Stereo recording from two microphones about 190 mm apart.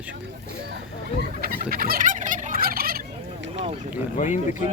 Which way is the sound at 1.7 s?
50° right (ahead or behind).